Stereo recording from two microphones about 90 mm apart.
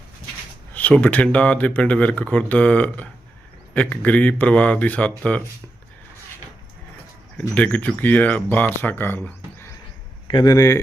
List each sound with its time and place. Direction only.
0.7 s speech: 15° left (ahead or behind)
7.3 s speech: 15° left (ahead or behind)
8.8 s speech: 25° left (ahead or behind)
10.2 s speech: 65° left (ahead or behind)
10.5 s speech: 35° left (ahead or behind)